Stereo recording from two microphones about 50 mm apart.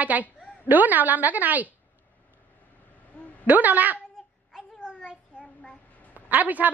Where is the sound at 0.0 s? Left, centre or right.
Right.